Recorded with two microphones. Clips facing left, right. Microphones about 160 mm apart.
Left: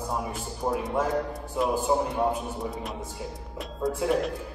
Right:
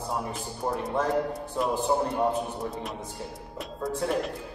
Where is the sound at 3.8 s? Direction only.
Centre (ahead or behind).